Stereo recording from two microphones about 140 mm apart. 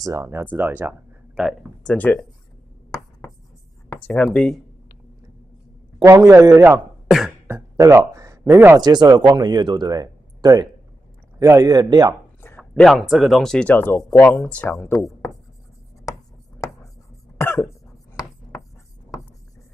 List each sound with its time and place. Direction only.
0.0 s speech: 20° right (ahead or behind)
1.9 s speech: 10° left (ahead or behind)
4.2 s speech: 5° left (ahead or behind)
5.9 s a man's voice: 25° right (ahead or behind)
6.7 s speech: 5° right (ahead or behind)
7.4 s a sound: 20° right (ahead or behind)
8.1 s a man's voice: 25° right (ahead or behind)
12.4 s a sound: 15° left (ahead or behind)
12.8 s speech: centre (ahead or behind); by 15.3 s 20° left (ahead or behind)
17.4 s cough: 20° left (ahead or behind)